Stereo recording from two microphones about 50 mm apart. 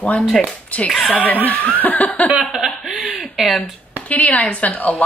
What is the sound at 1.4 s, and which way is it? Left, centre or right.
Speech, left.